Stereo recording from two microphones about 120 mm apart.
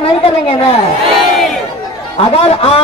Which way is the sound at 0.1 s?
50° left (ahead or behind).